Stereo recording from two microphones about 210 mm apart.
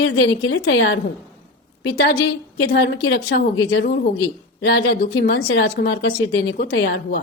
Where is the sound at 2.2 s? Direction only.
60° left (ahead or behind).